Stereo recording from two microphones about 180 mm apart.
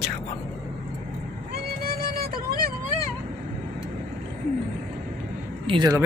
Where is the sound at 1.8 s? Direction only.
55° right (ahead or behind).